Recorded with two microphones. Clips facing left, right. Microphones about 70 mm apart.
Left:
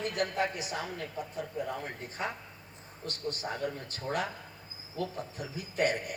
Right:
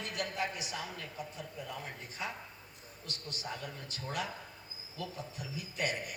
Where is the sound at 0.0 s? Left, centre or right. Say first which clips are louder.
Left 6 dB; left.